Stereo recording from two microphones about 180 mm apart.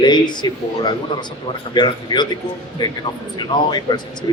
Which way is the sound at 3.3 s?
25° left (ahead or behind).